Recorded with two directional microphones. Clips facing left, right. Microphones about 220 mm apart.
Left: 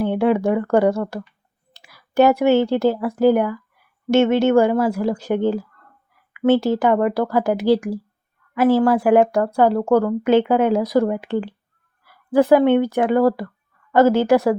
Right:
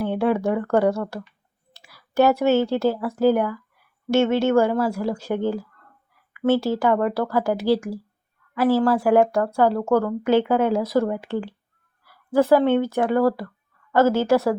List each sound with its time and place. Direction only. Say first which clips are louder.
0.0 s speech: left 3 dB; 20° left (ahead or behind)